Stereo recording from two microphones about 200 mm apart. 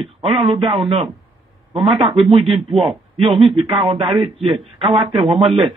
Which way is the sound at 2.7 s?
30° right (ahead or behind).